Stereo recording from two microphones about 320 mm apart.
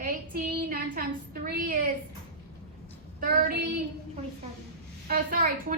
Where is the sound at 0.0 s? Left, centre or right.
Right.